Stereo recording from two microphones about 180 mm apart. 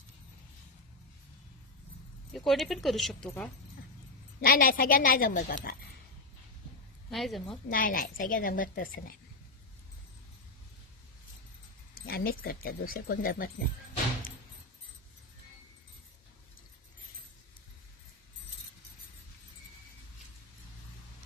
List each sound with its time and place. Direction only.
2.3 s speech: centre (ahead or behind)
4.4 s a woman's voice: 55° left (ahead or behind)
7.1 s speech: centre (ahead or behind)
7.7 s a woman's voice: 50° left (ahead or behind)
11.9 s speech: 55° left (ahead or behind)